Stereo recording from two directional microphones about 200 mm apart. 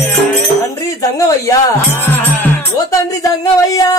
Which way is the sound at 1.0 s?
15° left (ahead or behind).